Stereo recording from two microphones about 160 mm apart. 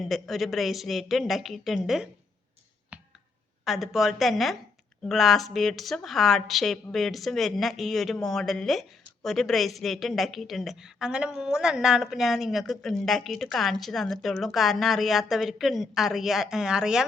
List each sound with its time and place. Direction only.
0.0 s speech: centre (ahead or behind)
2.9 s clicking: 5° right (ahead or behind)
3.6 s speech: centre (ahead or behind)